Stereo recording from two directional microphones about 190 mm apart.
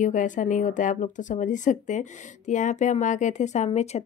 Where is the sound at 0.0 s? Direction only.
40° left (ahead or behind).